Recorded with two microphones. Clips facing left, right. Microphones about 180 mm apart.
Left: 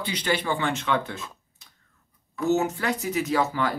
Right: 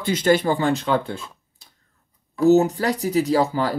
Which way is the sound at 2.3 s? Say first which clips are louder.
Right 8 dB; 35° right (ahead or behind).